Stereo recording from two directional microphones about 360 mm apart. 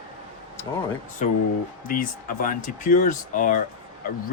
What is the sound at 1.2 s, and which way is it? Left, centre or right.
Speech, left.